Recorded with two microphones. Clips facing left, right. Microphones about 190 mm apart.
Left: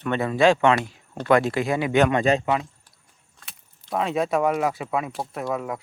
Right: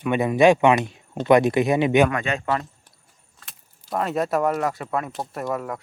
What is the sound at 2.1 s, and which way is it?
Speech, 35° left (ahead or behind).